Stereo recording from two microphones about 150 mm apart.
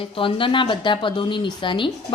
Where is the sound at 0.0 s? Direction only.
35° left (ahead or behind).